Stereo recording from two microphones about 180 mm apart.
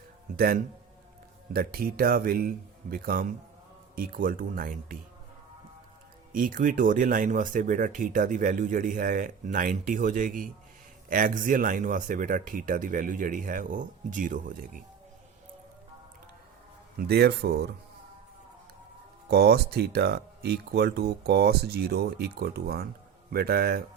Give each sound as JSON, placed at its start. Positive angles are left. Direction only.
{"t": 0.3, "sound": "speech", "side_deg": -55}
{"t": 6.3, "sound": "speech", "side_deg": -50}
{"t": 17.0, "sound": "speech", "side_deg": -65}
{"t": 19.3, "sound": "speech", "side_deg": -65}